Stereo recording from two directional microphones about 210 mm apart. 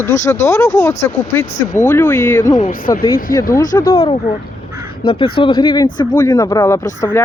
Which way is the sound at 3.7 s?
15° left (ahead or behind).